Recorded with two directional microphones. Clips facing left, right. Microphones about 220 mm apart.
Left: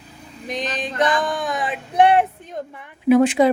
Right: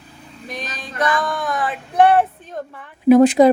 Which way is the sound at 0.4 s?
15° left (ahead or behind).